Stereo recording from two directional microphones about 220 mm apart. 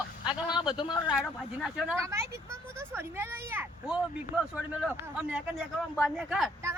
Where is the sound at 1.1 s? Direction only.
Centre (ahead or behind).